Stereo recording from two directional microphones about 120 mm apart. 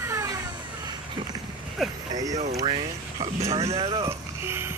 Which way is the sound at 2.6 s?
60° right (ahead or behind).